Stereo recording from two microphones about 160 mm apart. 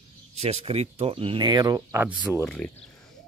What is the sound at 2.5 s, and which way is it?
Speech, 5° left (ahead or behind).